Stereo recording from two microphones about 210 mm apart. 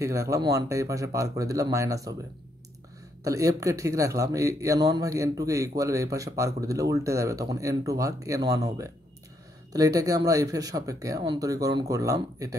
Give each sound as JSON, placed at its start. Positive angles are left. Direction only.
{"t": 0.0, "sound": "a man's voice", "side_deg": -15}
{"t": 3.3, "sound": "a man's voice", "side_deg": -15}